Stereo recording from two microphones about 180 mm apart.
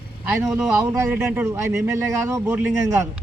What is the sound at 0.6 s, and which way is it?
Speech, 15° right (ahead or behind).